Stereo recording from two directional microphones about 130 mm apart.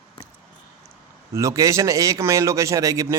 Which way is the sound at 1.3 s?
25° right (ahead or behind).